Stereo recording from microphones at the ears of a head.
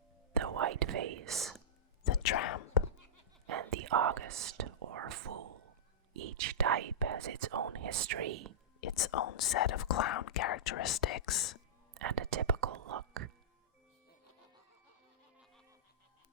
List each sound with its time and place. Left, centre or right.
0.3 s whispering: right
2.0 s whispering: left
3.4 s whispering: right
6.1 s speech: right
8.8 s speech: left
11.9 s speech: right